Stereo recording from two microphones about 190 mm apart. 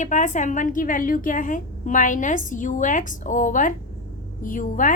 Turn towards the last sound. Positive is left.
turn(degrees=45)  # may be behind; listen again after turning